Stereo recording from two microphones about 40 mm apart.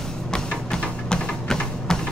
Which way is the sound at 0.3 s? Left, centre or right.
Centre.